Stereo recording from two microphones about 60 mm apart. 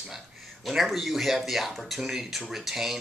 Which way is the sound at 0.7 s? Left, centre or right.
Centre.